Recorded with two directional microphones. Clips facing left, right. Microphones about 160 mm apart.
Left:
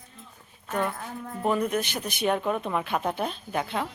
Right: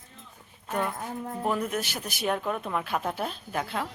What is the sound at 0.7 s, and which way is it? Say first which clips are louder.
A woman's voice: left 1 dB; 10° right (ahead or behind).